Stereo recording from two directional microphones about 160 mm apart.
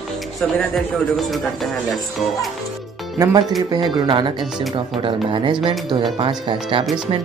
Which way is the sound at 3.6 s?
30° right (ahead or behind).